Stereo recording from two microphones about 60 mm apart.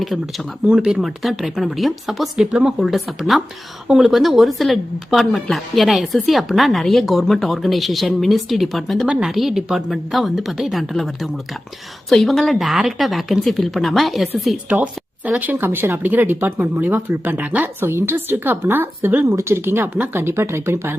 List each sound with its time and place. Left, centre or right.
0.0 s speech: centre
2.3 s a woman's voice: centre
2.7 s a woman's voice: centre
14.7 s speech: right